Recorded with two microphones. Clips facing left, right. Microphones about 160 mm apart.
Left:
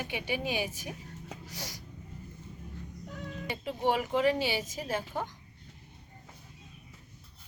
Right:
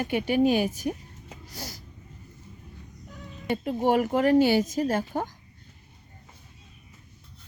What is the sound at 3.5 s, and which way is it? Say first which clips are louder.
Speech: right 6 dB; 50° right (ahead or behind).